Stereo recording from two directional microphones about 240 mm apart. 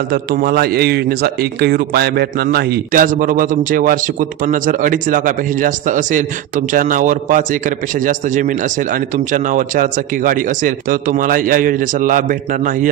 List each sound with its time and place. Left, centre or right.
0.1 s a man's voice: right